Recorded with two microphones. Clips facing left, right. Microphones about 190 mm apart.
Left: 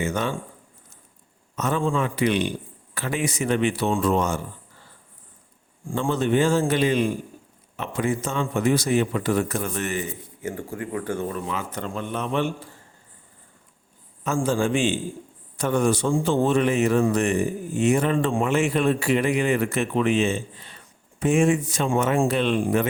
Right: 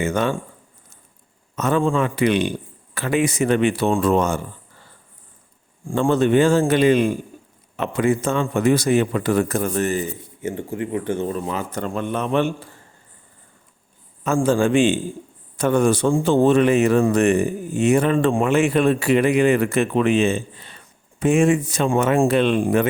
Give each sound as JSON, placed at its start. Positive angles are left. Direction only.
{"t": 0.0, "sound": "speech", "side_deg": -60}
{"t": 1.5, "sound": "speech", "side_deg": -60}
{"t": 6.0, "sound": "speech", "side_deg": -65}
{"t": 7.8, "sound": "a man's voice", "side_deg": -70}
{"t": 11.4, "sound": "speech", "side_deg": -40}
{"t": 14.3, "sound": "speech", "side_deg": -55}